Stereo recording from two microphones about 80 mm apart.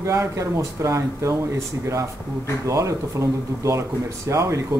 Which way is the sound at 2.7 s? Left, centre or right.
Right.